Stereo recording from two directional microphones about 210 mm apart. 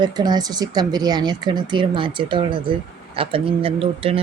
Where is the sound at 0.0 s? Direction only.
20° right (ahead or behind).